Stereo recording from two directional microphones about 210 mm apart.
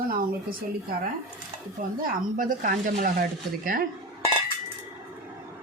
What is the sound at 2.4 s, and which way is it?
Speech, 40° right (ahead or behind).